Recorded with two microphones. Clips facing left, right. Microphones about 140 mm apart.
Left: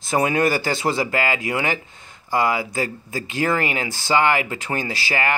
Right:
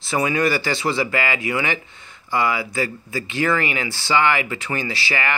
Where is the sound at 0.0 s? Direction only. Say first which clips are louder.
Left 1 dB; 45° left (ahead or behind).